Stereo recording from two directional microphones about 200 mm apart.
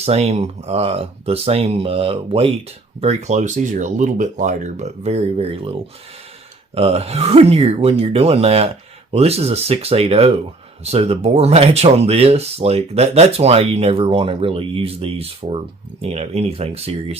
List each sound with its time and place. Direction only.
0.0 s speech: 30° right (ahead or behind)
6.7 s speech: 30° right (ahead or behind)